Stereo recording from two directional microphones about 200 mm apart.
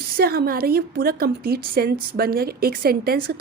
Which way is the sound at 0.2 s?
50° right (ahead or behind).